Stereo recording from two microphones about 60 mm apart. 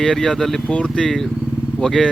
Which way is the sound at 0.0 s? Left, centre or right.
Centre.